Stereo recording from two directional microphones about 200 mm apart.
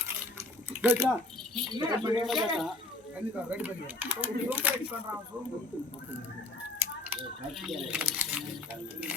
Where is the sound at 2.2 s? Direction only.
Centre (ahead or behind).